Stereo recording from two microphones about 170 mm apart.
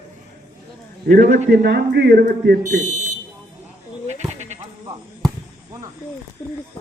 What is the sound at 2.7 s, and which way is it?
Speech, 45° right (ahead or behind).